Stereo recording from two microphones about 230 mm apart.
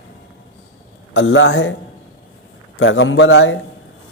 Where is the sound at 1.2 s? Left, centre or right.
Left.